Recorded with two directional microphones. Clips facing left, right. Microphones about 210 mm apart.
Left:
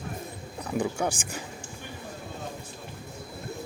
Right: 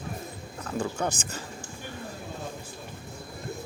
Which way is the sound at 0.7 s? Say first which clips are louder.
Left 2 dB; 15° left (ahead or behind).